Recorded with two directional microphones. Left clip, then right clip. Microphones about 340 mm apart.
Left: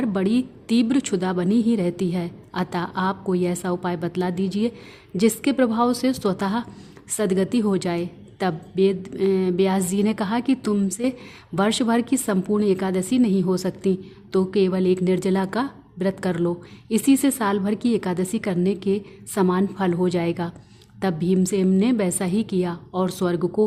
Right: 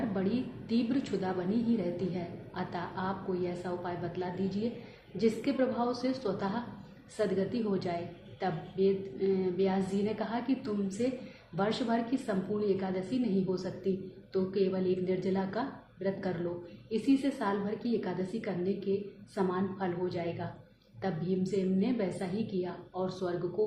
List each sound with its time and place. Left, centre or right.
0.1 s a woman's voice: left